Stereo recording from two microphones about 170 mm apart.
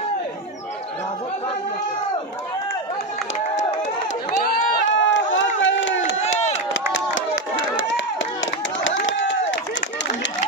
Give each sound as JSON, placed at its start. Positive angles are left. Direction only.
{"t": 3.3, "sound": "run", "side_deg": 45}
{"t": 4.5, "sound": "run", "side_deg": 90}
{"t": 6.7, "sound": "a sound", "side_deg": 90}